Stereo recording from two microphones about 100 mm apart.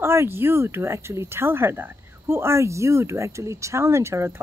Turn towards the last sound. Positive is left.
turn(degrees=-25)  # may be behind; listen again after turning